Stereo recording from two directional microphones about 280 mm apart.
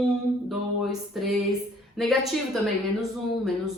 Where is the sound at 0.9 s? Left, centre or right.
Centre.